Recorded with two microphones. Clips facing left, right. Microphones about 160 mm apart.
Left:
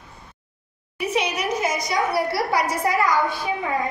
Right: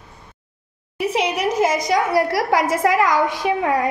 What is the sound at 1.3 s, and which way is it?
A woman's voice, 90° right.